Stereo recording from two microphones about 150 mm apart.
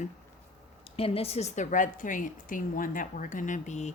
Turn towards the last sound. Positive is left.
turn(degrees=50)  # may be behind; listen again after turning